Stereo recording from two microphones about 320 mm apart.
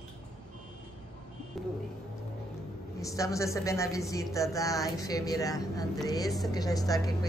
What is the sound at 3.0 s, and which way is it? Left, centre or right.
Speech, centre.